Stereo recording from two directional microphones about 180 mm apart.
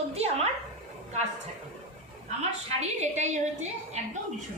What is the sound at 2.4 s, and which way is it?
A woman's voice, 40° right (ahead or behind).